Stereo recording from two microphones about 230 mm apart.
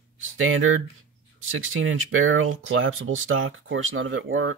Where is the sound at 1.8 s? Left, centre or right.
Right.